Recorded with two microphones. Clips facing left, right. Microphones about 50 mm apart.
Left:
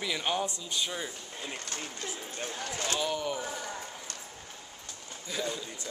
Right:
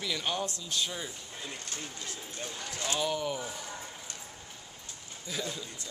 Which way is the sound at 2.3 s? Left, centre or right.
Left.